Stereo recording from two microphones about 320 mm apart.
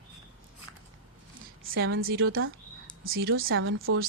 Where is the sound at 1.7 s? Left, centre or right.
Right.